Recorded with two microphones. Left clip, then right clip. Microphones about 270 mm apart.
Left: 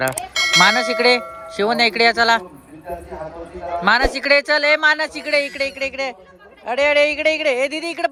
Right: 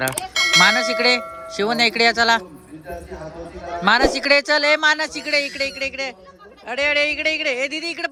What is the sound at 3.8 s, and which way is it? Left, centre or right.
A man's voice, centre.